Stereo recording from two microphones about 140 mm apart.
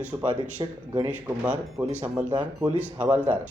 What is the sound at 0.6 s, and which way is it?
Speech, 30° right (ahead or behind).